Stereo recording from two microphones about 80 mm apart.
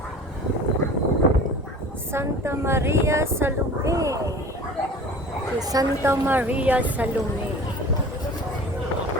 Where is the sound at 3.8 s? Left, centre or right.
Right.